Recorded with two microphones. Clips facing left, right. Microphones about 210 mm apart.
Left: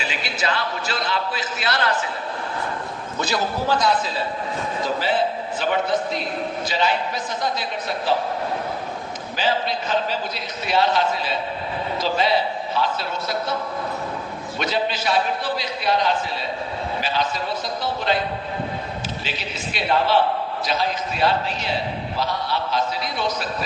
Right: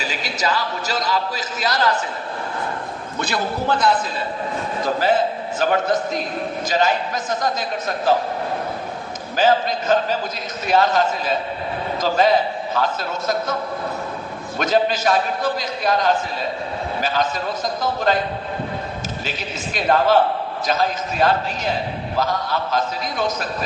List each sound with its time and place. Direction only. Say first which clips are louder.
0.0 s a sound: right 2 dB; 40° right (ahead or behind)
3.2 s a man's voice: even; 55° right (ahead or behind)
5.5 s a man's voice: right 3 dB; 45° right (ahead or behind)
9.3 s a man's voice: right 6 dB; 45° right (ahead or behind)
14.6 s a man's voice: right 6 dB; 45° right (ahead or behind)
19.7 s a man's voice: right 3 dB; 45° right (ahead or behind)